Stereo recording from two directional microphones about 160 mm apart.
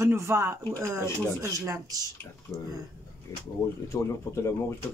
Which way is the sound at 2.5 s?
15° left (ahead or behind).